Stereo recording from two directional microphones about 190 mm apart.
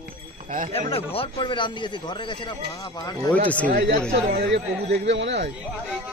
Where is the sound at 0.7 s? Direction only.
30° left (ahead or behind).